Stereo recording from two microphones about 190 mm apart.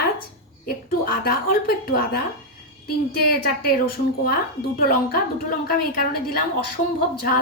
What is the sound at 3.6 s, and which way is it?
A woman's voice, 50° left (ahead or behind).